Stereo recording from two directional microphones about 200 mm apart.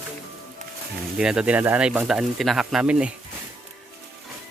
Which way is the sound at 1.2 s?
5° right (ahead or behind).